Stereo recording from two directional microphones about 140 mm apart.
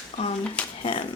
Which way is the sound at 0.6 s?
10° left (ahead or behind).